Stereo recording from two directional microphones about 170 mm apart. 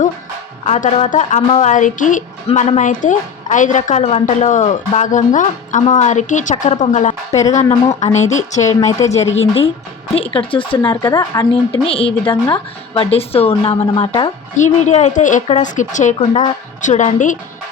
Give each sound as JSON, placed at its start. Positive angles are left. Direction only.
{"t": 0.6, "sound": "a woman's voice", "side_deg": 40}
{"t": 8.9, "sound": "speech", "side_deg": 20}
{"t": 9.1, "sound": "a woman's voice", "side_deg": 40}
{"t": 11.9, "sound": "a woman's voice", "side_deg": 35}